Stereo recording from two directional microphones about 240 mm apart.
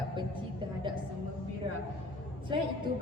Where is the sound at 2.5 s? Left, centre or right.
Right.